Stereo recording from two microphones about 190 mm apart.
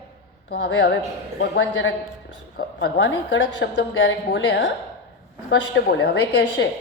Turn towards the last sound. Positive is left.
turn(degrees=60)  # may be behind; listen again after turning